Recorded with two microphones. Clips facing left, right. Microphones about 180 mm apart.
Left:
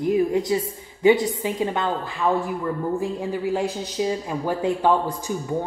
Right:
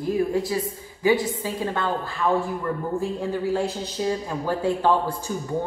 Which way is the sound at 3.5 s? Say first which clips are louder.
Even; 15° left (ahead or behind).